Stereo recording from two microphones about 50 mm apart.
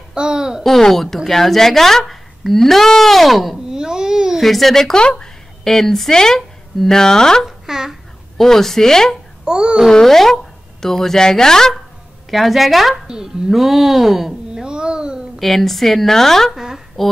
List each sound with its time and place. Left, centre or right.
0.1 s speech: centre
0.7 s a woman's voice: centre
3.6 s babbling: centre
4.4 s a woman's voice: centre
7.4 s speech: centre
8.4 s speech: centre
9.4 s a child's voice: centre
9.8 s speech: centre
12.3 s a woman's voice: centre
13.0 s speech: centre
14.5 s a sound: centre
15.3 s a woman's voice: centre
16.5 s a woman's voice: centre